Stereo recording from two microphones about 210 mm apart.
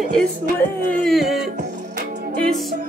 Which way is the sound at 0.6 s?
Centre (ahead or behind).